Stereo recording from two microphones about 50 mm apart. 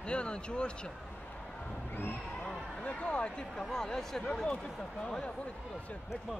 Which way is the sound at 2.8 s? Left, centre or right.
Left.